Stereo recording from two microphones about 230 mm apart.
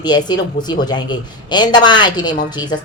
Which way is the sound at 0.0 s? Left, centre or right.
Centre.